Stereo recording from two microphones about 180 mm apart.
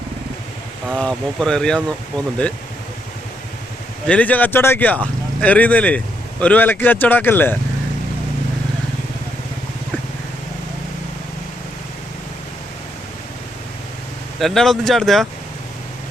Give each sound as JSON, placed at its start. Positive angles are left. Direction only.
{"t": 0.9, "sound": "speech", "side_deg": 5}
{"t": 4.0, "sound": "speech", "side_deg": 5}
{"t": 14.3, "sound": "speech", "side_deg": 0}